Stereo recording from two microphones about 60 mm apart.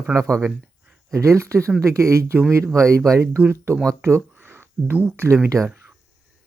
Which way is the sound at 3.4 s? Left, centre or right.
Right.